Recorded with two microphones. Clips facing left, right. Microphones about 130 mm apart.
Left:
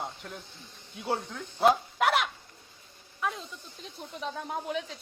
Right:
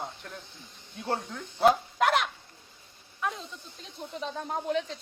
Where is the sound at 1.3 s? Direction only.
Centre (ahead or behind).